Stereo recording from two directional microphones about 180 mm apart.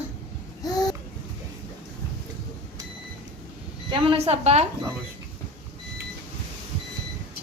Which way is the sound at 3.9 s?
30° right (ahead or behind).